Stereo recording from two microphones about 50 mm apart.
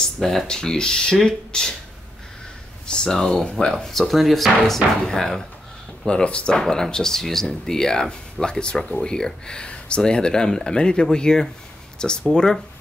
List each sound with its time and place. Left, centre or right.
0.5 s speech: centre
2.9 s speech: centre
6.0 s speech: left